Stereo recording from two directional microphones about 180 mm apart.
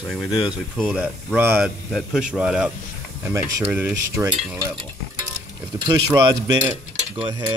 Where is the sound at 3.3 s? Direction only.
15° right (ahead or behind).